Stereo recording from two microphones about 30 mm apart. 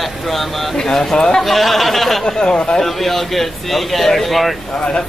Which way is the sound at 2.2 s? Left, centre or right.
Left.